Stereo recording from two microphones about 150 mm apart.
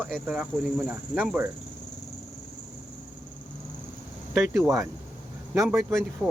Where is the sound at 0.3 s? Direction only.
5° right (ahead or behind).